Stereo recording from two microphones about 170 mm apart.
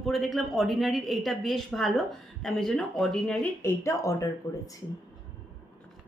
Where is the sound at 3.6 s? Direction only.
15° left (ahead or behind).